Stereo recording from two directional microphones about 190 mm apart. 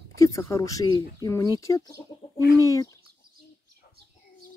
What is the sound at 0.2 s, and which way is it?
Speech, 15° left (ahead or behind).